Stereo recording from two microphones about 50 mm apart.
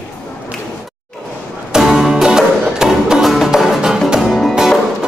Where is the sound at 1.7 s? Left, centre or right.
Centre.